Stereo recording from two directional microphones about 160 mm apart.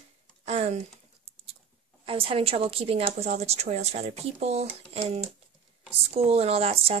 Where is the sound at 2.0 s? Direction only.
35° right (ahead or behind).